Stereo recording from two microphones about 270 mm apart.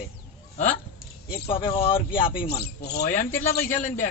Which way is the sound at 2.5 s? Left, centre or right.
Left.